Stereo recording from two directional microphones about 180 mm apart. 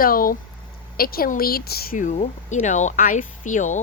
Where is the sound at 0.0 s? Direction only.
50° left (ahead or behind).